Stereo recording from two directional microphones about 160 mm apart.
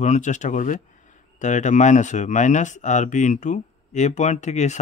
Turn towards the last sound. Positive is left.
turn(degrees=45)  # may be behind; listen again after turning